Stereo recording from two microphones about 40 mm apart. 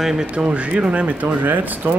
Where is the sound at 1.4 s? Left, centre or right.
Right.